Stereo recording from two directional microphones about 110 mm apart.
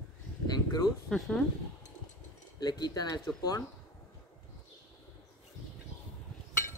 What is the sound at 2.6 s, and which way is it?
Speech, 40° left (ahead or behind).